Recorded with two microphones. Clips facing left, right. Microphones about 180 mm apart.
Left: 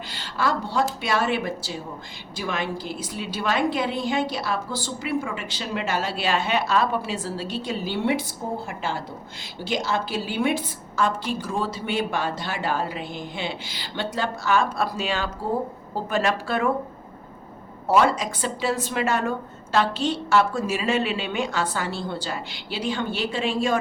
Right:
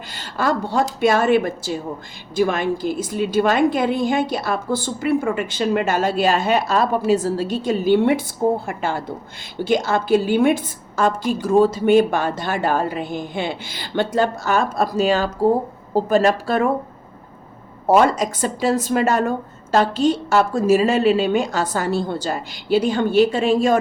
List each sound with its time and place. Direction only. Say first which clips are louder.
0.1 s a woman's voice: right 4 dB; 45° right (ahead or behind)
17.8 s a woman's voice: right 5 dB; 45° right (ahead or behind)